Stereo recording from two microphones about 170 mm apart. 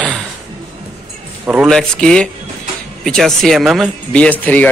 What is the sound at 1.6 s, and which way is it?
Speech, 5° left (ahead or behind).